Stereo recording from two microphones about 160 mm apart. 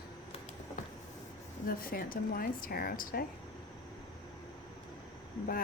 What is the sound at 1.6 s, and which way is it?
Speech, 65° left (ahead or behind).